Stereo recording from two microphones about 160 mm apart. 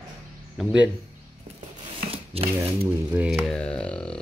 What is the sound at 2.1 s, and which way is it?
Shuffling cards, 35° right (ahead or behind).